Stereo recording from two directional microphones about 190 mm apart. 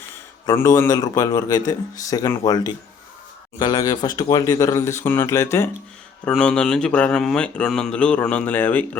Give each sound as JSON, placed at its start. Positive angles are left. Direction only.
{"t": 0.4, "sound": "a man's voice", "side_deg": 15}